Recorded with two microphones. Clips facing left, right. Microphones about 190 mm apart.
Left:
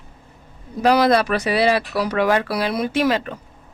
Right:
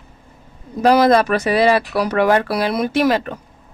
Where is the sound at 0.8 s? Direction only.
45° right (ahead or behind).